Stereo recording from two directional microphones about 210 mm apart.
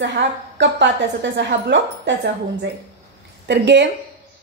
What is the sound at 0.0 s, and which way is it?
A woman's voice, 55° right (ahead or behind).